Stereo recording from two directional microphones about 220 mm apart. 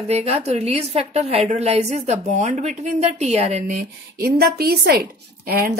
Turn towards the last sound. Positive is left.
turn(degrees=-45)  # may be behind; listen again after turning